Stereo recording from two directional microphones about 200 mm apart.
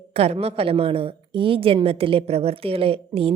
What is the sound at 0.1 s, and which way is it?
A woman's voice, 30° right (ahead or behind).